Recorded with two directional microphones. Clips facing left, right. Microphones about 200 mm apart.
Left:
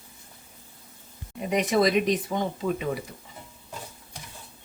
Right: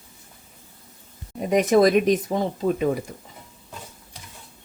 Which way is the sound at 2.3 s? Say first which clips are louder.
Right 4 dB; 35° right (ahead or behind).